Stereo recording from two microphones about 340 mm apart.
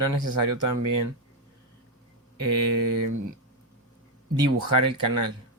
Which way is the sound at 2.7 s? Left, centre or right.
Right.